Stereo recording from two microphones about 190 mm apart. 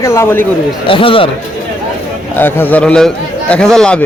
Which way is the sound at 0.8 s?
30° left (ahead or behind).